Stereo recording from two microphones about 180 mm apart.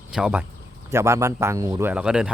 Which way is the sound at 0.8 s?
15° right (ahead or behind).